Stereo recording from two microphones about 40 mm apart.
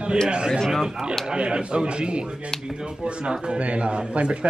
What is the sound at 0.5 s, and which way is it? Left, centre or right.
Speech, centre.